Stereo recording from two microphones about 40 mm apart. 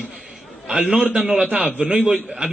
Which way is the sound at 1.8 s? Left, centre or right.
Right.